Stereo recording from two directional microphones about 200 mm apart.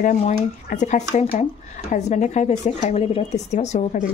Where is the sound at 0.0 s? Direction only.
40° left (ahead or behind).